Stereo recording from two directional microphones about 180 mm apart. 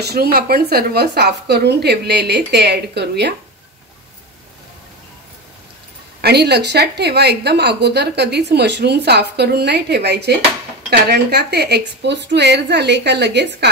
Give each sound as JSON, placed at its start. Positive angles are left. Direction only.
{"t": 0.0, "sound": "a woman's voice", "side_deg": -60}
{"t": 6.2, "sound": "a woman's voice", "side_deg": -65}